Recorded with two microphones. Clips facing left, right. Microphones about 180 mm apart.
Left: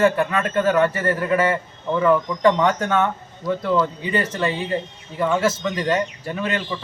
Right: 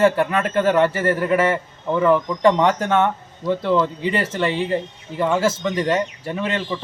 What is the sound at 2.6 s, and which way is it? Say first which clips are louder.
Speech: right 2 dB; 30° right (ahead or behind).